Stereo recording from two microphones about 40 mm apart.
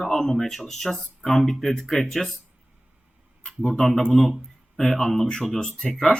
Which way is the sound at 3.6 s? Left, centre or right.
Centre.